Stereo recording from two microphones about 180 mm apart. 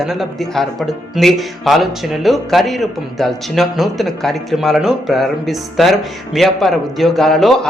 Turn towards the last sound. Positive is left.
turn(degrees=0)  # may be behind; listen again after turning